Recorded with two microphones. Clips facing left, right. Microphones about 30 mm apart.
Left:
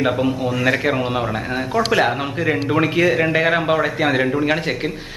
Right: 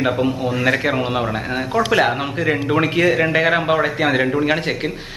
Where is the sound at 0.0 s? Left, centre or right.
Centre.